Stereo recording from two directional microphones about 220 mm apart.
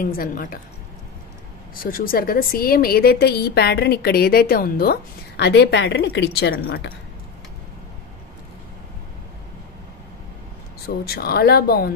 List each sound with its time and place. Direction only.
0.0 s a woman's voice: 40° left (ahead or behind)
1.8 s a woman's voice: 40° left (ahead or behind)
11.1 s a woman's voice: 45° left (ahead or behind)